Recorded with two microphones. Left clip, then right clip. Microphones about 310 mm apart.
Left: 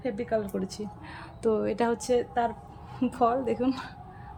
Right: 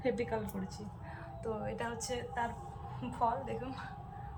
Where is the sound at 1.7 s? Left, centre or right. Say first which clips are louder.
Left 12 dB; left.